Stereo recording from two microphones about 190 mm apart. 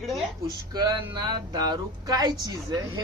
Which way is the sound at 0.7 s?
20° right (ahead or behind).